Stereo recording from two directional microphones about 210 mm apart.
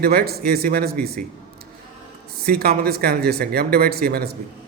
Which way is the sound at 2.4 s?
45° right (ahead or behind).